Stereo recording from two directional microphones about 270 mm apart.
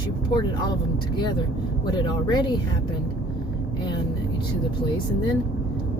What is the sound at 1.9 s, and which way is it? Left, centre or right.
Speech, centre.